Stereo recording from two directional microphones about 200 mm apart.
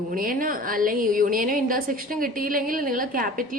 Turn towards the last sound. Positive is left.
turn(degrees=-45)  # may be behind; listen again after turning